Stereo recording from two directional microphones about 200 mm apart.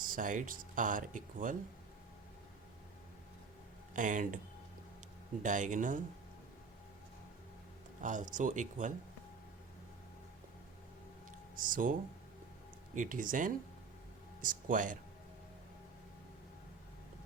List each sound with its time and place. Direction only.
0.0 s speech: 45° right (ahead or behind)
3.9 s speech: 40° right (ahead or behind)
5.4 s speech: 40° right (ahead or behind)
8.0 s speech: 40° right (ahead or behind)
11.6 s speech: 45° right (ahead or behind)